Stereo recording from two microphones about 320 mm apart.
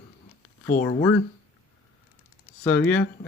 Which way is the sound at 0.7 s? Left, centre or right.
Left.